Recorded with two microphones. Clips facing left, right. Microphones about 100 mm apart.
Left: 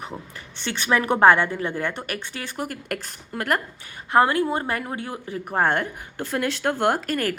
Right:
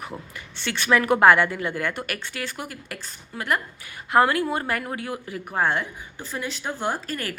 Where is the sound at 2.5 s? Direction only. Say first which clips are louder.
Left 6 dB; 50° left (ahead or behind).